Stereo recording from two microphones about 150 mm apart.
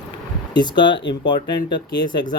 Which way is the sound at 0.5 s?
30° left (ahead or behind).